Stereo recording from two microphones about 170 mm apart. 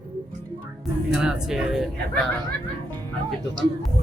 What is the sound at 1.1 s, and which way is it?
Speech, 5° right (ahead or behind).